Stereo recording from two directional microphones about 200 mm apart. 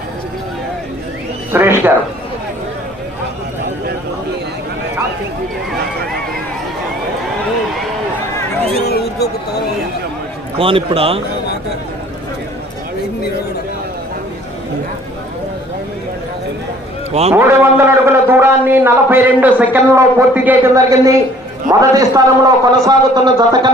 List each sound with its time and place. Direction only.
1.5 s a man's voice: 10° right (ahead or behind)
8.9 s a sound: 50° left (ahead or behind)
10.6 s a man's voice: 25° right (ahead or behind)
17.3 s a man's voice: 10° right (ahead or behind)